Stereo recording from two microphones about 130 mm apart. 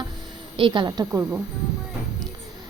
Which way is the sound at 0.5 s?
40° right (ahead or behind).